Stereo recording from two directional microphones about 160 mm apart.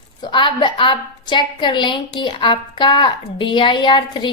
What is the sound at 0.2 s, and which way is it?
A woman's voice, 30° left (ahead or behind).